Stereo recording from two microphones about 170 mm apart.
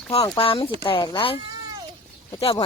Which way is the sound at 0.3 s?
30° left (ahead or behind).